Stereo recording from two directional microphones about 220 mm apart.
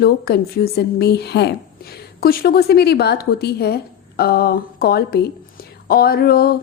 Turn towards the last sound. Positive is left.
turn(degrees=45)  # may be behind; listen again after turning